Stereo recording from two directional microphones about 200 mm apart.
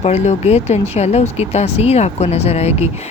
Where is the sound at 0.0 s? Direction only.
30° left (ahead or behind).